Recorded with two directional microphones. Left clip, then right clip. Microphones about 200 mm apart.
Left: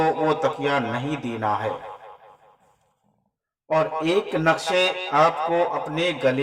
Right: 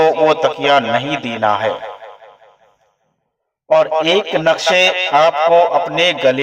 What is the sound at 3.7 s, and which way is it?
A man's voice, 35° right (ahead or behind).